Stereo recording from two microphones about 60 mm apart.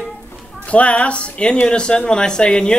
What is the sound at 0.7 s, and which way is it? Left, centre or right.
Speech, left.